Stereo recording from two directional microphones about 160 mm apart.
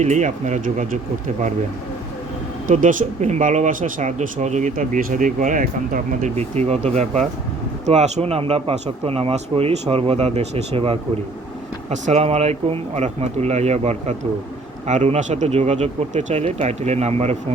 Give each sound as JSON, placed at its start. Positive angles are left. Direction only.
{"t": 0.0, "sound": "speech", "side_deg": -50}
{"t": 2.6, "sound": "speech", "side_deg": -55}
{"t": 6.3, "sound": "speech", "side_deg": -40}